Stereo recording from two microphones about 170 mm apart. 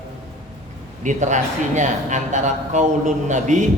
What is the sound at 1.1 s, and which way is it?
Speech, 45° right (ahead or behind).